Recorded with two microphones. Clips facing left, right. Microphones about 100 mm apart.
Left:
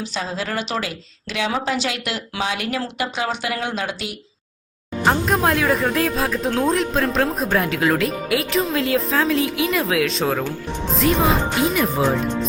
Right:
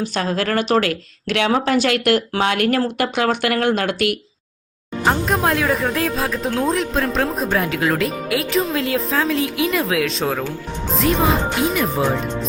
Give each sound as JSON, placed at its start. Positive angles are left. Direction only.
{"t": 0.0, "sound": "speech", "side_deg": -55}
{"t": 0.9, "sound": "speech", "side_deg": -65}
{"t": 5.0, "sound": "speech", "side_deg": 0}